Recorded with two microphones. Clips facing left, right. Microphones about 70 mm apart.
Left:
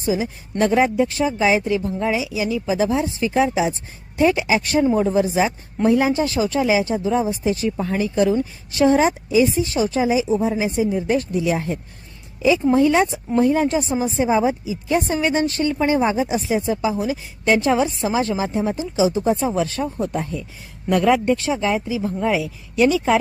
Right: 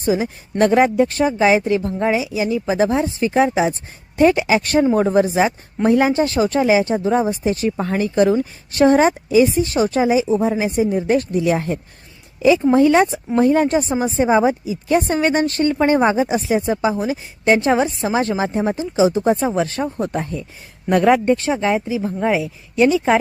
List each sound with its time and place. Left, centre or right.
0.0 s a woman's voice: right
10.4 s speech: right
10.8 s speech: right
14.3 s speech: right